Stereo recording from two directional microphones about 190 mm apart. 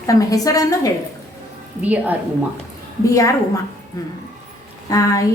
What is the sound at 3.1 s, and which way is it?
A woman's voice, 15° left (ahead or behind).